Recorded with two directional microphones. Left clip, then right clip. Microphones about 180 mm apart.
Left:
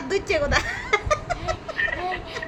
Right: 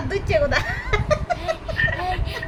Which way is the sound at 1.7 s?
75° right (ahead or behind).